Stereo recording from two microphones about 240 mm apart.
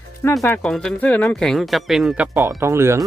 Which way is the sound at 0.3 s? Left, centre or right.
Centre.